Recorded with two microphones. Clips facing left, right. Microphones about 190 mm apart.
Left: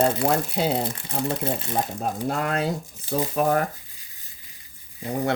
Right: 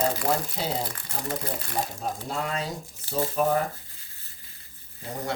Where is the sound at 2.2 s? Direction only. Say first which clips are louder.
Left 7 dB; 60° left (ahead or behind).